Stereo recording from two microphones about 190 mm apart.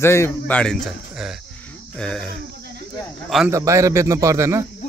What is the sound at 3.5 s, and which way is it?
A man's voice, 15° right (ahead or behind).